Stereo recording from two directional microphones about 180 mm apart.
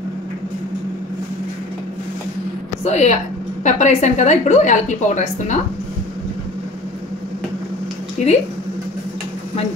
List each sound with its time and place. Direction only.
2.8 s a woman's voice: 40° left (ahead or behind)
8.2 s speech: 40° left (ahead or behind)